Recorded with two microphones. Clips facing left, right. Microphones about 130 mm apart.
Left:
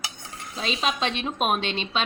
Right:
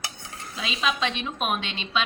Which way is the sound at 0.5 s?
35° left (ahead or behind).